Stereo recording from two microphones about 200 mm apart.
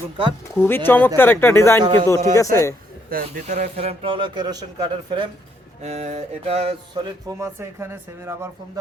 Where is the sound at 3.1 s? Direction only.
40° right (ahead or behind); by 5.2 s 20° right (ahead or behind).